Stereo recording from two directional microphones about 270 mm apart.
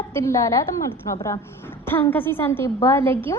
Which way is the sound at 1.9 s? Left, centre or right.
Centre.